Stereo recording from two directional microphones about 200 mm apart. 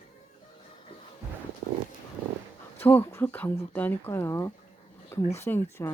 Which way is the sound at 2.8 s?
10° left (ahead or behind).